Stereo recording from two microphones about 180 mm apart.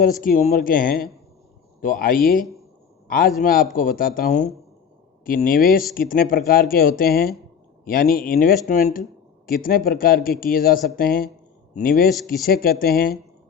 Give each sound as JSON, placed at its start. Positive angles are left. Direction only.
{"t": 0.0, "sound": "speech", "side_deg": 50}